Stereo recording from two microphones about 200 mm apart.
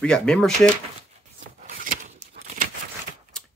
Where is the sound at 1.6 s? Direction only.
40° right (ahead or behind).